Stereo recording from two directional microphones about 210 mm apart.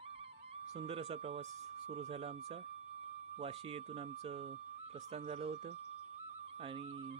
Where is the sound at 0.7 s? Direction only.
30° right (ahead or behind).